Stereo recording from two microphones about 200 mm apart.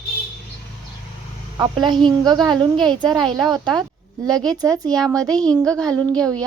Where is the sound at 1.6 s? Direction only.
20° right (ahead or behind).